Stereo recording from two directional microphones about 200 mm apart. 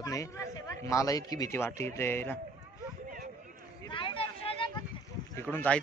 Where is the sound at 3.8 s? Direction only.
25° left (ahead or behind).